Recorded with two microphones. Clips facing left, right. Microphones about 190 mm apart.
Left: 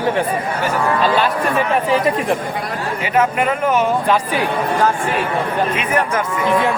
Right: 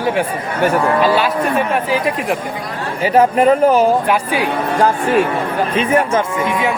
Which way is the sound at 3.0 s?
35° right (ahead or behind).